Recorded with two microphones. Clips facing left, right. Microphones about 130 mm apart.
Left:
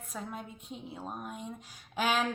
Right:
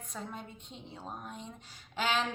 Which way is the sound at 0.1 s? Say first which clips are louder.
Left 2 dB; 5° left (ahead or behind).